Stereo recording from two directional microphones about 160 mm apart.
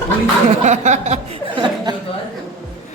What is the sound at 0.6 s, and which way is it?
Chuckle, 50° right (ahead or behind).